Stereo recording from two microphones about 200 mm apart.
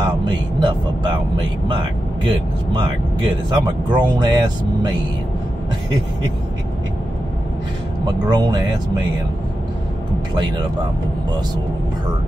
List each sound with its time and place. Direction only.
0.0 s vehicle: 25° right (ahead or behind)
1.7 s speech: 25° right (ahead or behind)
8.3 s speech: 20° right (ahead or behind)